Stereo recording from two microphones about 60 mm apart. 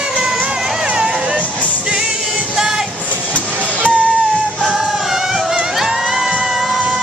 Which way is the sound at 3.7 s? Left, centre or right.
Right.